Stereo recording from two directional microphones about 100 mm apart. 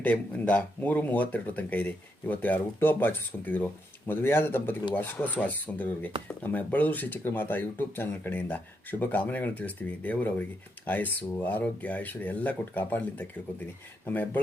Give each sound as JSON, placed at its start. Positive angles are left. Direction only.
{"t": 0.0, "sound": "speech", "side_deg": 15}